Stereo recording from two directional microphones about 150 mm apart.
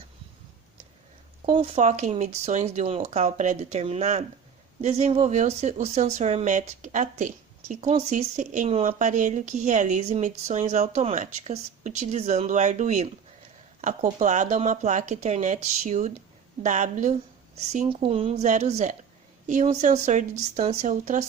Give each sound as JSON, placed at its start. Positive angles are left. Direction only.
{"t": 1.5, "sound": "a woman's voice", "side_deg": -45}
{"t": 17.8, "sound": "a woman's voice", "side_deg": -40}